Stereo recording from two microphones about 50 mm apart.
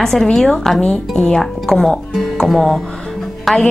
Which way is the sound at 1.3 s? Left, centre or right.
Centre.